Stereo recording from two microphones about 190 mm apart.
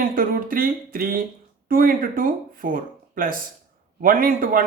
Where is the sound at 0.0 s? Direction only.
50° right (ahead or behind).